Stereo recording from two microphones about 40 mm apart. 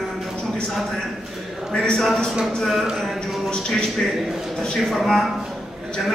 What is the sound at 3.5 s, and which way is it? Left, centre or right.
Speech, centre.